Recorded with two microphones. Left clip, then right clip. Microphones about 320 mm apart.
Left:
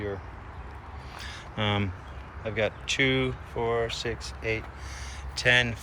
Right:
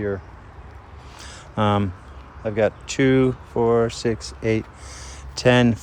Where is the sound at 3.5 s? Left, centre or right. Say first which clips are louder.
Right 9 dB; right.